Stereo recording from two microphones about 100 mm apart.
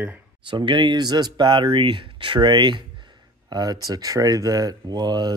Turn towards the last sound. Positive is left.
turn(degrees=-40)  # may be behind; listen again after turning